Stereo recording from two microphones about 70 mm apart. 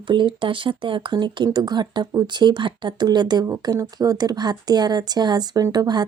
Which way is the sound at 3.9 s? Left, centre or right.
Right.